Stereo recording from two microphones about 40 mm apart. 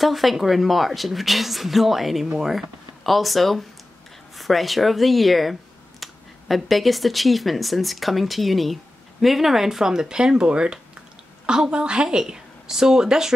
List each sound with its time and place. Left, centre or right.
0.0 s a woman's voice: centre
3.0 s a woman's voice: centre; by 12.2 s right
12.2 s speech: centre